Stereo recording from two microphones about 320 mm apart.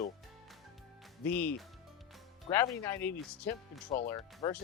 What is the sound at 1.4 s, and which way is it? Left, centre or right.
Speech, centre.